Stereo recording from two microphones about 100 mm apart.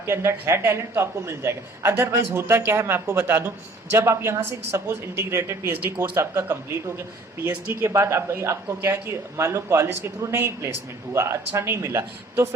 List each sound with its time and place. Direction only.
0.0 s a man's voice: 25° right (ahead or behind)